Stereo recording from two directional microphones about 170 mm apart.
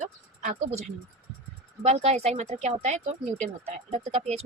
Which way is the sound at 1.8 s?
40° right (ahead or behind).